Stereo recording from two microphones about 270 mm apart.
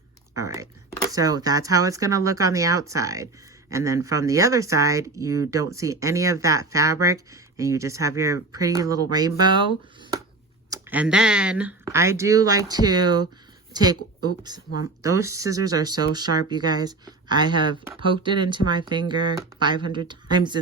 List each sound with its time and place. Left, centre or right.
0.3 s speech: centre
10.7 s speech: centre